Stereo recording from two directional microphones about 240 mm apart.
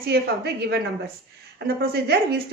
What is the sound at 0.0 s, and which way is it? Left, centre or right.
A woman's voice, right.